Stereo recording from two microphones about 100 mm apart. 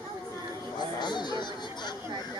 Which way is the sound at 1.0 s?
45° left (ahead or behind).